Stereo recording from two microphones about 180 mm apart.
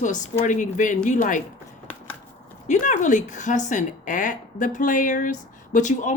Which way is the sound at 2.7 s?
45° left (ahead or behind).